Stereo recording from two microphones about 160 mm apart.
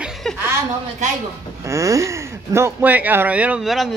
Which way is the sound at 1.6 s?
20° right (ahead or behind).